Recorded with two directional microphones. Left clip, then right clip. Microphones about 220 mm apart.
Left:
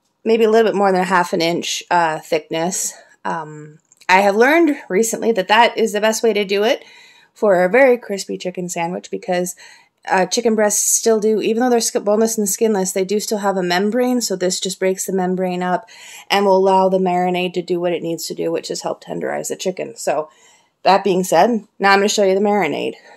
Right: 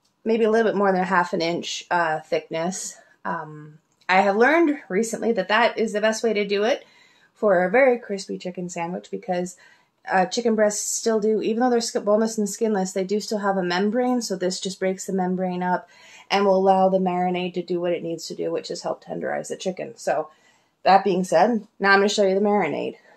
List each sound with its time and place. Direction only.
0.2 s speech: 40° left (ahead or behind)